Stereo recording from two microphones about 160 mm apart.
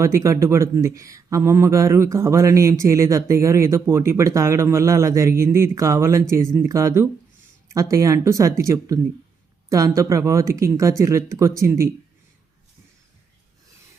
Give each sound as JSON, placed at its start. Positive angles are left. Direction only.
{"t": 0.0, "sound": "speech", "side_deg": -20}